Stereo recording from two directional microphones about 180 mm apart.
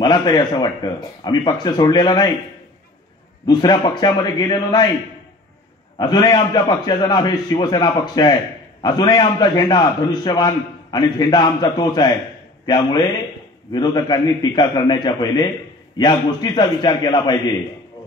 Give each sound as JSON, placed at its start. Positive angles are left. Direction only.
{"t": 0.0, "sound": "a man's voice", "side_deg": 25}
{"t": 3.4, "sound": "a man's voice", "side_deg": 25}
{"t": 5.9, "sound": "a man's voice", "side_deg": 25}